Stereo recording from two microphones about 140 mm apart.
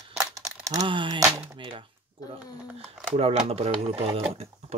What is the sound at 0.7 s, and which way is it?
Speech, 30° right (ahead or behind).